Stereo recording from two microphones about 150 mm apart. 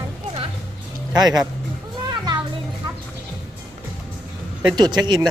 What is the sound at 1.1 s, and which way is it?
Speech, 25° right (ahead or behind).